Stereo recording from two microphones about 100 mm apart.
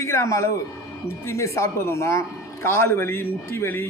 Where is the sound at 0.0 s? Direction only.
30° left (ahead or behind).